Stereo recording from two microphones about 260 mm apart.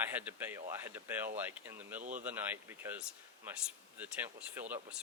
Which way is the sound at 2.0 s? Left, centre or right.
Right.